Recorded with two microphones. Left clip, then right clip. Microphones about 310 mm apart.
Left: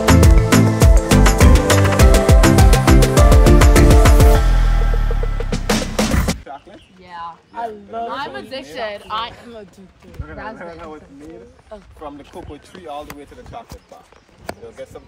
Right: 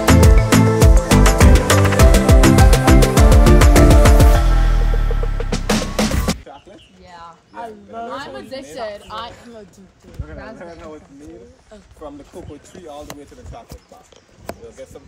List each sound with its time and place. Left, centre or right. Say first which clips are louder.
0.0 s music: even; centre
5.4 s music: even; centre
7.5 s a sound: left 4 dB; left
8.1 s a sound: left 3 dB; centre
10.2 s speech: left 3 dB; centre
12.7 s speech: left 5 dB; centre